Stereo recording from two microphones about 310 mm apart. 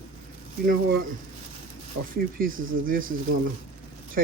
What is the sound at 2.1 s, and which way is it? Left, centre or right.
Speech, right.